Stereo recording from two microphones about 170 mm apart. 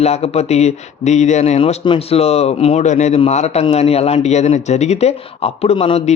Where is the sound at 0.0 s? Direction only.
40° left (ahead or behind).